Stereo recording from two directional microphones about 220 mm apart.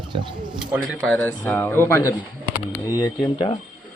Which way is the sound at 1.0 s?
5° left (ahead or behind).